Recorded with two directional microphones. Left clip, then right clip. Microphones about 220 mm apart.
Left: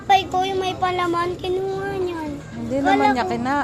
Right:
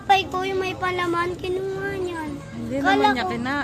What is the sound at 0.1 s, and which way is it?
Speech, 20° right (ahead or behind).